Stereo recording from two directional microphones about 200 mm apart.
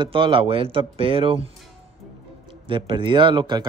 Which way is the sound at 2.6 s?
25° right (ahead or behind).